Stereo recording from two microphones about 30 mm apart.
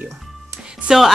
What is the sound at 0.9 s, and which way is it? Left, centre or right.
Speech, centre.